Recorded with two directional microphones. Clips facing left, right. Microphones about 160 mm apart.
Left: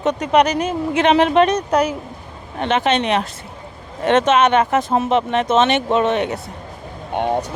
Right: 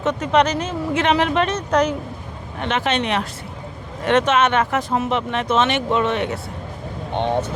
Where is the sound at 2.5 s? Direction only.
20° left (ahead or behind).